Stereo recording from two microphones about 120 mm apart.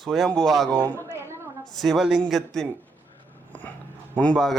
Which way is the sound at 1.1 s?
20° right (ahead or behind).